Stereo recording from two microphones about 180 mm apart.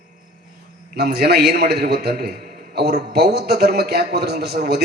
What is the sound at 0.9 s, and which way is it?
A man's voice, 65° right (ahead or behind).